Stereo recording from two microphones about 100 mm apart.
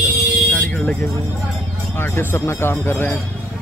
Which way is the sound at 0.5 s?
15° left (ahead or behind).